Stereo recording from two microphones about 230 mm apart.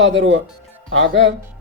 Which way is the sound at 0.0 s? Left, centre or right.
Right.